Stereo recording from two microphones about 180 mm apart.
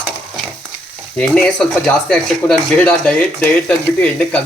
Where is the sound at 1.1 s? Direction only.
5° left (ahead or behind).